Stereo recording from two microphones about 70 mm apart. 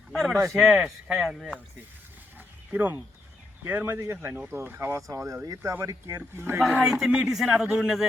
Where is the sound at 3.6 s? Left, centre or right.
Right.